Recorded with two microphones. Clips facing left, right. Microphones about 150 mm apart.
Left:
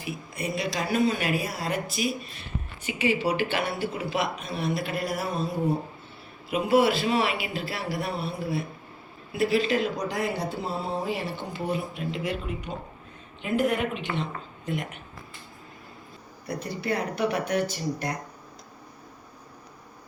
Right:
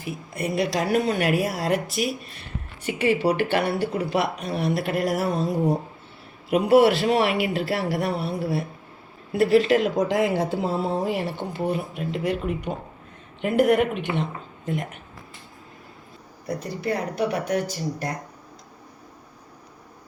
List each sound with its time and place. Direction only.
0.0 s speech: 55° right (ahead or behind); by 2.1 s 75° right (ahead or behind)
2.8 s speech: 60° right (ahead or behind)
10.0 s speech: 90° right; by 14.1 s 65° right (ahead or behind)
16.5 s speech: 45° right (ahead or behind)